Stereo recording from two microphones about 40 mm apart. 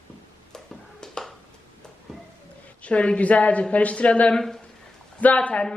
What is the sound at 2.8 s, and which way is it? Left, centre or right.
A woman's voice, left.